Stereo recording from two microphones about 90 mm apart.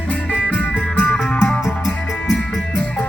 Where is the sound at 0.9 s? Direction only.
20° left (ahead or behind).